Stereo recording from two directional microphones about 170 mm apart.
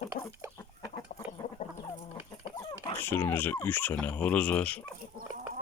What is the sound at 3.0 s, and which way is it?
Speech, 15° left (ahead or behind).